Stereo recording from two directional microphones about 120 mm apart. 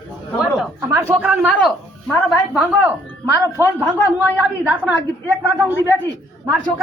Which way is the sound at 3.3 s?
20° right (ahead or behind).